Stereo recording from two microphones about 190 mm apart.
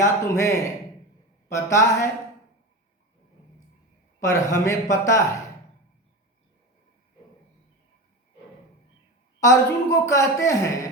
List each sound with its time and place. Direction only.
0.0 s a woman's voice: 15° left (ahead or behind)
4.3 s a woman's voice: 15° left (ahead or behind)
9.4 s a woman's voice: 15° left (ahead or behind)